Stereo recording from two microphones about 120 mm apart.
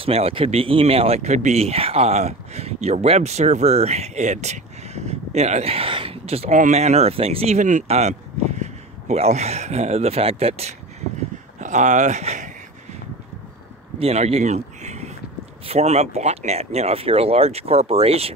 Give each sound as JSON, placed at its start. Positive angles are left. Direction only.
{"t": 0.0, "sound": "speech", "side_deg": -55}
{"t": 11.6, "sound": "speech", "side_deg": -80}
{"t": 13.9, "sound": "a sound", "side_deg": -60}
{"t": 15.6, "sound": "speech", "side_deg": -60}